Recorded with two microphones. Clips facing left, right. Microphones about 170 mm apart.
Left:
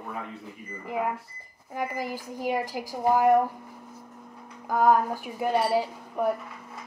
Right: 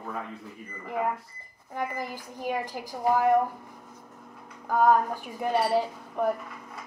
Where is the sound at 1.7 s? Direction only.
10° left (ahead or behind).